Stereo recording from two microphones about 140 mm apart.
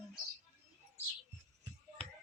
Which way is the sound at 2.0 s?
50° right (ahead or behind).